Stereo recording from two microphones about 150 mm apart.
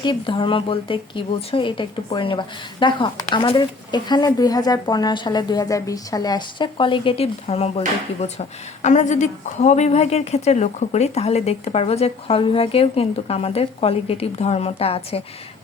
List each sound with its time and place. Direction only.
0.0 s speech: 35° left (ahead or behind)